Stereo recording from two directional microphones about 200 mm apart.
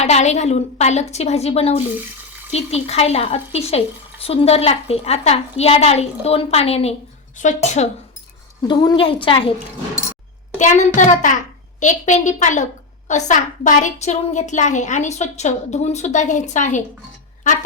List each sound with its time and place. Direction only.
0.0 s a woman's voice: 35° left (ahead or behind)
8.6 s a woman's voice: 20° left (ahead or behind)
10.6 s a woman's voice: 35° left (ahead or behind)